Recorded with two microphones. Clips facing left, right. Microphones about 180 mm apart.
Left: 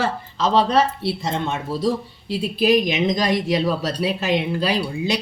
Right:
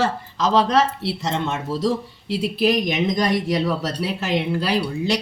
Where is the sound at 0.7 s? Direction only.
90° right.